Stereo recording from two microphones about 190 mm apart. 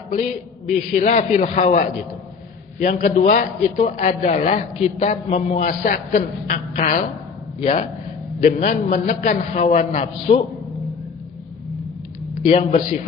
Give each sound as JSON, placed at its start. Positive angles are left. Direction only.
{"t": 0.1, "sound": "a man's voice", "side_deg": 40}
{"t": 12.3, "sound": "speech", "side_deg": 40}